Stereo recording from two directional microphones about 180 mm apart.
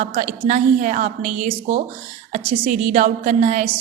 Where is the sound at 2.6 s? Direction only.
45° right (ahead or behind).